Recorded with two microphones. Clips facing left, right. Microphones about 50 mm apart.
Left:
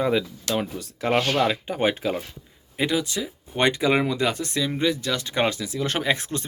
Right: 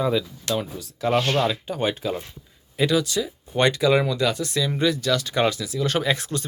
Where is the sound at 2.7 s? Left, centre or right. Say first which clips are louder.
Right 3 dB; left.